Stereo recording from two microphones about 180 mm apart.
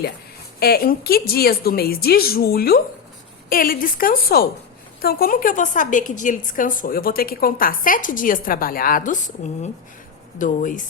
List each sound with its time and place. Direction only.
0.6 s a woman's voice: 60° left (ahead or behind)